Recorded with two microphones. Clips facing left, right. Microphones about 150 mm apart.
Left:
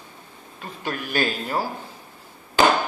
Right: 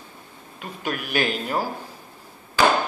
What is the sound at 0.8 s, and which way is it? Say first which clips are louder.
Speech: even; 10° right (ahead or behind).